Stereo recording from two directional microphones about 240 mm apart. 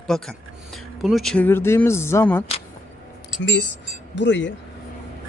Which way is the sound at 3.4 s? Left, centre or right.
Left.